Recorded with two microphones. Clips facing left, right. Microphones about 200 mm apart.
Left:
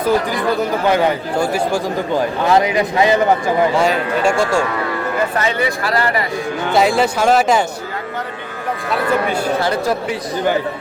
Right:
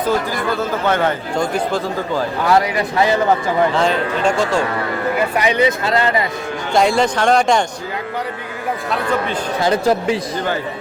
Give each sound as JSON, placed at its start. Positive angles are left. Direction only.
{"t": 0.0, "sound": "speech", "side_deg": 15}
{"t": 2.1, "sound": "speech", "side_deg": 20}
{"t": 3.7, "sound": "speech", "side_deg": 10}
{"t": 5.4, "sound": "speech", "side_deg": -20}
{"t": 6.7, "sound": "speech", "side_deg": 5}
{"t": 9.6, "sound": "speech", "side_deg": -20}